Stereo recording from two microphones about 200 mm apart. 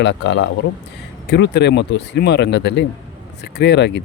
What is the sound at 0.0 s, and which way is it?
Speech, 60° left (ahead or behind).